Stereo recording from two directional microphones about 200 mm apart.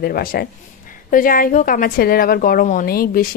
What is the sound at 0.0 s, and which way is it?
A woman's voice, 45° left (ahead or behind).